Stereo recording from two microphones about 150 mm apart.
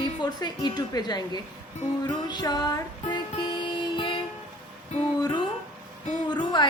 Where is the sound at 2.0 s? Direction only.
30° left (ahead or behind).